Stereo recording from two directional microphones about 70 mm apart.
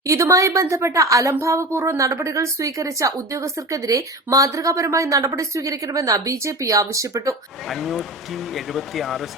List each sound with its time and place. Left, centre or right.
0.1 s speech: right
7.7 s speech: centre